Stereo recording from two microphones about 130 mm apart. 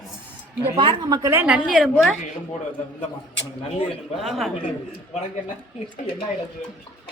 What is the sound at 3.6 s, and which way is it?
Speech, 50° left (ahead or behind).